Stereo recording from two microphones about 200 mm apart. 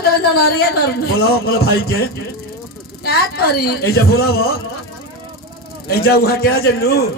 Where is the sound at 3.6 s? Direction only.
50° left (ahead or behind).